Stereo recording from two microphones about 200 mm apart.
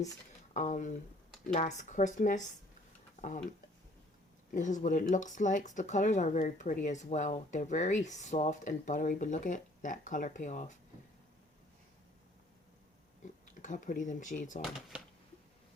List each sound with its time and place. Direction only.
0.5 s speech: 35° left (ahead or behind)
4.5 s speech: 40° left (ahead or behind)
13.5 s speech: 40° left (ahead or behind)
14.6 s speech: centre (ahead or behind)